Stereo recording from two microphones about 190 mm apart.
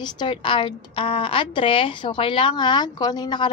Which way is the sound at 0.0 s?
25° left (ahead or behind).